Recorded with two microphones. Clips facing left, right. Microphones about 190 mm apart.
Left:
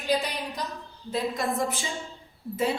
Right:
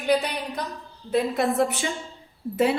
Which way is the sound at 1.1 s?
65° right (ahead or behind).